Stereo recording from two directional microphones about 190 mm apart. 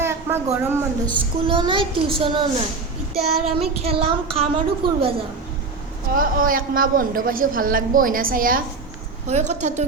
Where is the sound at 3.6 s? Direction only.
30° right (ahead or behind).